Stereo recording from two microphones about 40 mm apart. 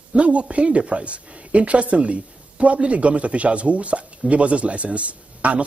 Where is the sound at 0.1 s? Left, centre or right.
Right.